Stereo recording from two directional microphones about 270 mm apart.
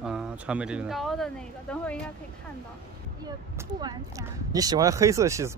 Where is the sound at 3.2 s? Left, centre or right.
Centre.